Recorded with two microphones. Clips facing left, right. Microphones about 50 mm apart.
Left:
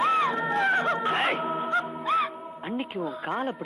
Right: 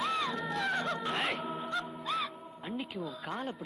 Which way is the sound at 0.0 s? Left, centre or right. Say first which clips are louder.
Left 9 dB; left.